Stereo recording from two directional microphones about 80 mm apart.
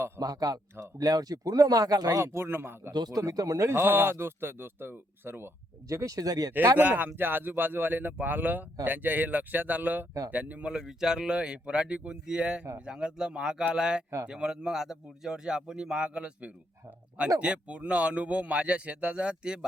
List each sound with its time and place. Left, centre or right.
0.2 s speech: right
2.9 s speech: right
3.7 s speech: right
5.9 s speech: right
6.7 s speech: right